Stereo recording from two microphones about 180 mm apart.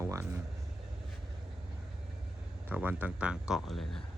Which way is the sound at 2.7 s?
10° right (ahead or behind).